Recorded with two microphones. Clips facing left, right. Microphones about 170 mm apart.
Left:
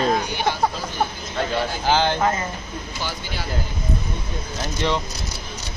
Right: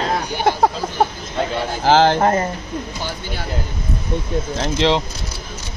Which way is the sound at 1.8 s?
90° right.